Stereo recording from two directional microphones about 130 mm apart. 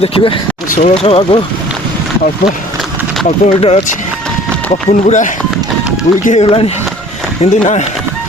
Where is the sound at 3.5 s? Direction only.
45° left (ahead or behind).